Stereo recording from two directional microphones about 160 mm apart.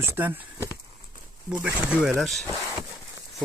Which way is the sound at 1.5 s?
5° right (ahead or behind).